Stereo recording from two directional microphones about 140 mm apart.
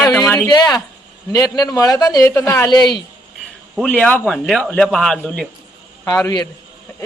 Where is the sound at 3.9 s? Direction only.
10° left (ahead or behind).